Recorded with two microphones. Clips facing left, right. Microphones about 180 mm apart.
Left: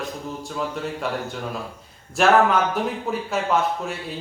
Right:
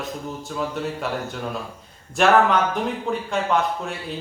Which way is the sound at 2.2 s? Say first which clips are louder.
Even; centre (ahead or behind).